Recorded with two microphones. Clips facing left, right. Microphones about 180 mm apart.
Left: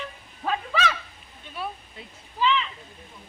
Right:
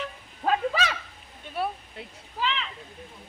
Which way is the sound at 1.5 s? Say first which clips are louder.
Right 4 dB; 60° right (ahead or behind).